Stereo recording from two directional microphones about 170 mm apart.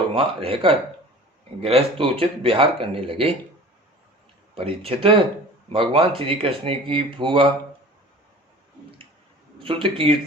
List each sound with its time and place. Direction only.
0.1 s speech: 35° right (ahead or behind)
4.5 s speech: 35° right (ahead or behind)
9.8 s speech: 30° right (ahead or behind)